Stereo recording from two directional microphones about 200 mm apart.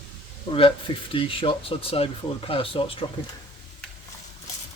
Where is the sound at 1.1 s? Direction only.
25° left (ahead or behind).